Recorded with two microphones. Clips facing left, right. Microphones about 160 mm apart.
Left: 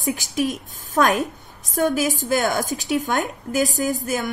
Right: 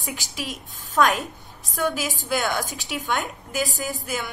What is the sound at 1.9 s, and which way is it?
A woman's voice, 45° left (ahead or behind).